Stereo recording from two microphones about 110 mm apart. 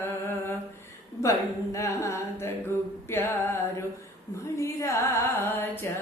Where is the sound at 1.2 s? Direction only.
30° left (ahead or behind).